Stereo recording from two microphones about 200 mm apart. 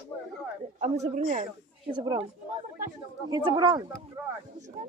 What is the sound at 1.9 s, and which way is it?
Speech, 25° right (ahead or behind).